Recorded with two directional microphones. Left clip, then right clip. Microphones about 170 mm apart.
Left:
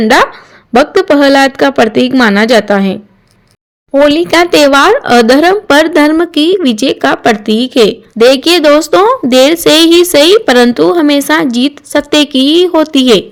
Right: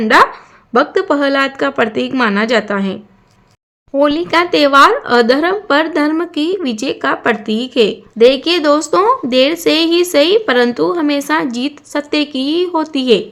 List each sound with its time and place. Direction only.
0.0 s speech: 35° left (ahead or behind)
4.0 s speech: 35° left (ahead or behind)